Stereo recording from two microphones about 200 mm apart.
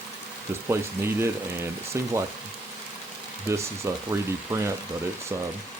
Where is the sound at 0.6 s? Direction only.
10° right (ahead or behind).